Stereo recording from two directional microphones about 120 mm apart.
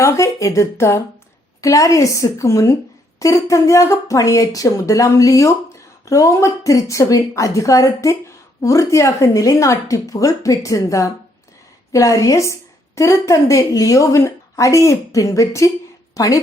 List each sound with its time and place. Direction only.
0.0 s a woman's voice: 25° left (ahead or behind)